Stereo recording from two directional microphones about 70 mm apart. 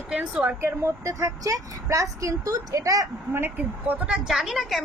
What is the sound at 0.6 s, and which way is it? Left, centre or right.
A woman's voice, right.